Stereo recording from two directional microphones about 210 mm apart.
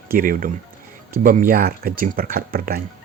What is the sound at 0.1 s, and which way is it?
Speech, 40° right (ahead or behind).